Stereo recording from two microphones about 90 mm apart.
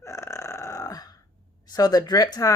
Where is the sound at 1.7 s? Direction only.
45° left (ahead or behind).